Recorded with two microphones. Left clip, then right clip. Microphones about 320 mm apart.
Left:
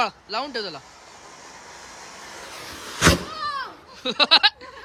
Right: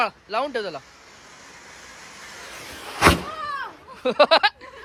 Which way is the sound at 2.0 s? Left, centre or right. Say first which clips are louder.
Even; left.